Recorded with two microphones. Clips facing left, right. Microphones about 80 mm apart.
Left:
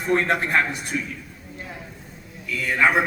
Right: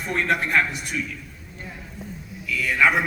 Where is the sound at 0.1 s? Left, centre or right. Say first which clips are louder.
Left 2 dB; left.